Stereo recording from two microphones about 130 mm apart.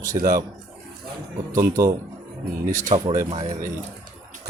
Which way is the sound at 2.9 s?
45° right (ahead or behind).